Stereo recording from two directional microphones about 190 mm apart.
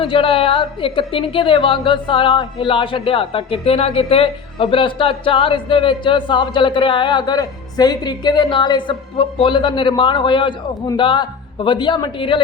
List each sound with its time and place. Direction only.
0.0 s a woman's voice: 25° left (ahead or behind)